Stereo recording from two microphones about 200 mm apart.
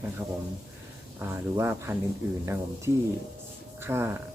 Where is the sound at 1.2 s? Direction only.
10° right (ahead or behind).